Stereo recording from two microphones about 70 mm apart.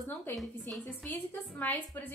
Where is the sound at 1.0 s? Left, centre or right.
Left.